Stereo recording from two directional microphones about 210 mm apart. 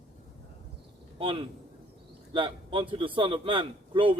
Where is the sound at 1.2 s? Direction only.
25° right (ahead or behind).